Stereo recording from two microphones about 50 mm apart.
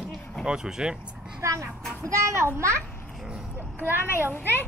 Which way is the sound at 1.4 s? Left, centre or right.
Right.